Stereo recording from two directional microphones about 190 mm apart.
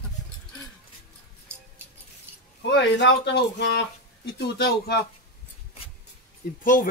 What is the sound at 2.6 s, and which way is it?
Speech, 70° left (ahead or behind).